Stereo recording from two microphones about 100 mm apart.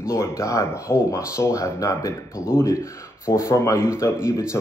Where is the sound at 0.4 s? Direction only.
30° left (ahead or behind).